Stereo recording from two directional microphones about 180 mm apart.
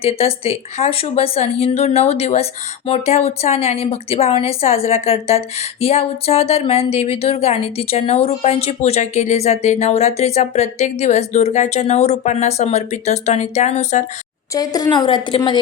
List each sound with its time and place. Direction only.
0.0 s speech: 35° left (ahead or behind)
14.5 s a woman's voice: 20° left (ahead or behind)